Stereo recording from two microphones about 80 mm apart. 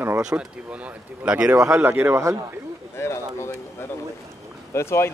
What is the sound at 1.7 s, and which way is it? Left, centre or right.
Speech, right.